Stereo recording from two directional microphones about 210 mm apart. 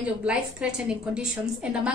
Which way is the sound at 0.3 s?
5° right (ahead or behind).